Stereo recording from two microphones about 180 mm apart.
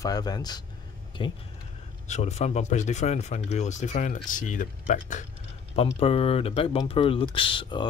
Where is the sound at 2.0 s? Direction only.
40° left (ahead or behind).